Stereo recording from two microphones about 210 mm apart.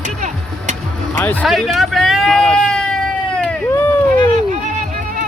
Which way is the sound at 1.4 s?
Centre (ahead or behind).